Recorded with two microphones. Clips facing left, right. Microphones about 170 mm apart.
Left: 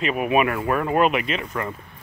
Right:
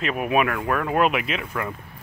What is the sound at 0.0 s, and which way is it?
Speech, centre (ahead or behind).